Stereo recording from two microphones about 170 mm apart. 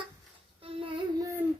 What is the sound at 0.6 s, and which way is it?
Child singing, 35° right (ahead or behind).